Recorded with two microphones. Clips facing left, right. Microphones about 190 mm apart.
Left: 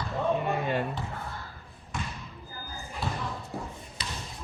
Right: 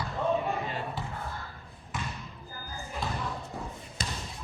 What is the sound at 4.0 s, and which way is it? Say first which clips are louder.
Basketball bounce: right 3 dB; 45° right (ahead or behind).